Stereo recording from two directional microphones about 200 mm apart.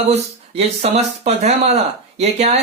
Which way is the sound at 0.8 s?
30° right (ahead or behind).